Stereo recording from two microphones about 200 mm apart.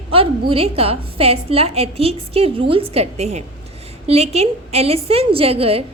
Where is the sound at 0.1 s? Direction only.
30° right (ahead or behind).